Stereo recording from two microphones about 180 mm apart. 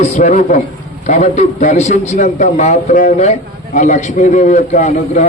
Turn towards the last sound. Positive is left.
turn(degrees=40)  # may be behind; listen again after turning